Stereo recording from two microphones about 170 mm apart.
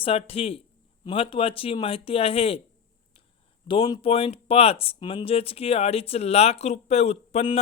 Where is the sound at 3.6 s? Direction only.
25° left (ahead or behind).